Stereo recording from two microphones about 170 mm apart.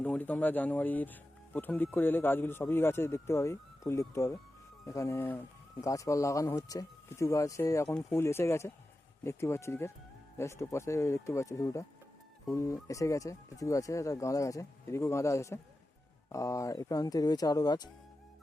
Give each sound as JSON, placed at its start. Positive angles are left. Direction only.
{"t": 0.0, "sound": "speech", "side_deg": 10}